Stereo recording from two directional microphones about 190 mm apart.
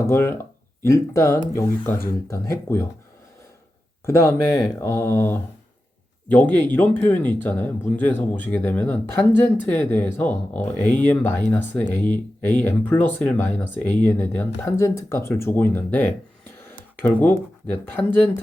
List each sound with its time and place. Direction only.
0.1 s speech: 10° left (ahead or behind)
4.0 s speech: 15° left (ahead or behind)